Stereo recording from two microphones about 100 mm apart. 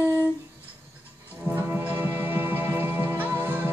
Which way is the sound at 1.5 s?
20° right (ahead or behind).